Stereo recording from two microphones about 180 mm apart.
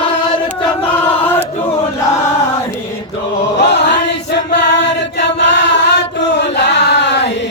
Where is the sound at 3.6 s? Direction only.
70° left (ahead or behind).